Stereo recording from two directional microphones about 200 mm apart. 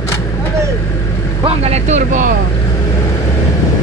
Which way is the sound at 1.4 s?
30° right (ahead or behind).